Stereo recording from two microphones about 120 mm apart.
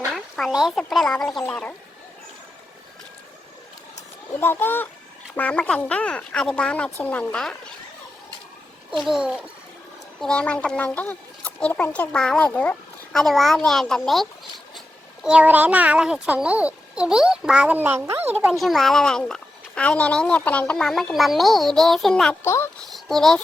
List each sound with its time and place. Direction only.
0.1 s speech: centre (ahead or behind)
4.4 s speech: 20° left (ahead or behind)
8.9 s speech: centre (ahead or behind)
10.2 s speech: 5° left (ahead or behind)
15.2 s a child's voice: 10° right (ahead or behind)
18.5 s speech: centre (ahead or behind)
22.4 s speech: 25° left (ahead or behind)
22.9 s a sound: centre (ahead or behind)